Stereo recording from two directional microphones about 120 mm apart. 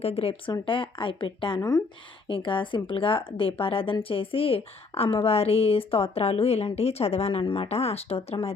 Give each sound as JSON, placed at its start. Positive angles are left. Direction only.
{"t": 0.0, "sound": "a woman's voice", "side_deg": 55}